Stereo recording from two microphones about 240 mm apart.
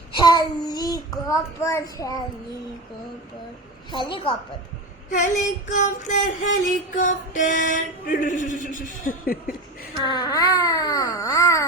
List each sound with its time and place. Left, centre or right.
0.1 s a child's voice: centre
3.9 s a woman's voice: centre
5.1 s a sound: left
10.0 s speech: centre